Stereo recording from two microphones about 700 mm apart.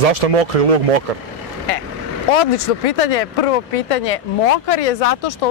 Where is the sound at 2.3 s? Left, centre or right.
Left.